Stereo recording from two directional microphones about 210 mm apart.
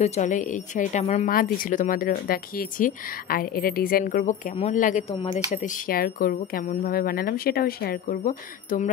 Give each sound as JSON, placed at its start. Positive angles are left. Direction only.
{"t": 0.0, "sound": "speech", "side_deg": 35}